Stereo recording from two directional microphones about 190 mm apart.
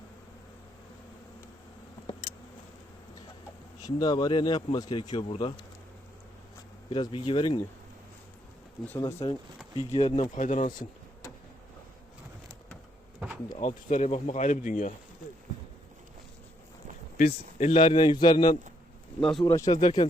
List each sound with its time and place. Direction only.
3.8 s speech: 20° left (ahead or behind)
6.9 s speech: 25° left (ahead or behind)
9.2 s speech: 25° left (ahead or behind)
10.3 s speech: 40° left (ahead or behind)
10.7 s a sound: 20° left (ahead or behind)
13.1 s bee: 5° right (ahead or behind)
13.6 s speech: 35° left (ahead or behind)
17.2 s speech: 45° left (ahead or behind)
17.7 s speech: 25° left (ahead or behind)
19.2 s speech: centre (ahead or behind)
19.5 s speech: 15° left (ahead or behind)